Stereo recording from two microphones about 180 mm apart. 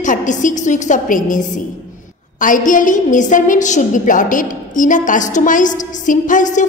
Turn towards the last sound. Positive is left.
turn(degrees=45)  # may be behind; listen again after turning